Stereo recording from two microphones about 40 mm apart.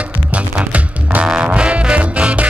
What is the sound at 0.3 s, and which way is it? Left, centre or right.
Music, right.